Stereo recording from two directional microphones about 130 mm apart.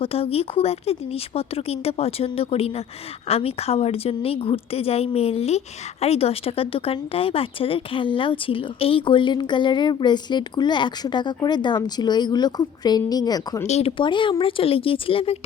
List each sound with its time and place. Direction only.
0.0 s a woman's voice: 50° left (ahead or behind); by 13.7 s 30° left (ahead or behind)
13.7 s speech: 55° left (ahead or behind)
14.0 s a woman's voice: 40° left (ahead or behind)